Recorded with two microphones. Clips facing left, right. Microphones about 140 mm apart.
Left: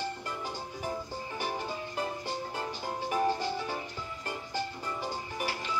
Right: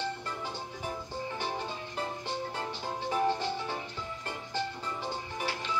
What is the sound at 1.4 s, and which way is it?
Music, 10° left (ahead or behind).